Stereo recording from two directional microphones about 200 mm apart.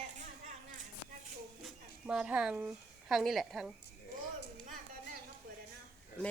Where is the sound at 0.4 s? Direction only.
40° right (ahead or behind).